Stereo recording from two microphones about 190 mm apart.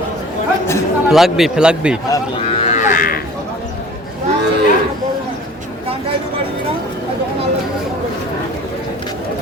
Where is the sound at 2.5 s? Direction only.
40° left (ahead or behind).